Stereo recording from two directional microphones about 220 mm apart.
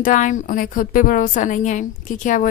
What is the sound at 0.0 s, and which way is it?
A woman's voice, 35° left (ahead or behind).